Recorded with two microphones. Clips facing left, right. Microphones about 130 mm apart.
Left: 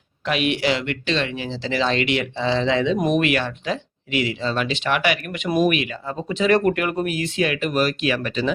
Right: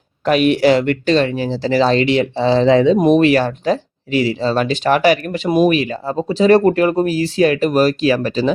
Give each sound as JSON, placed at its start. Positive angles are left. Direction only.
{"t": 0.3, "sound": "speech", "side_deg": -40}